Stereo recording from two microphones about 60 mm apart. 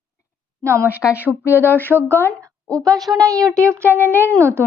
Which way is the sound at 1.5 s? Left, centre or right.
Left.